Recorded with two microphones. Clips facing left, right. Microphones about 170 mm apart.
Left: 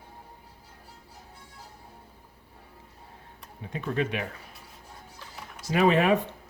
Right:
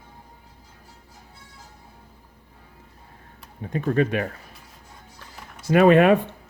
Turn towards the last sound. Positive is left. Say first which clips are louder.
# right 7 dB
turn(degrees=-60)  # may be behind; listen again after turning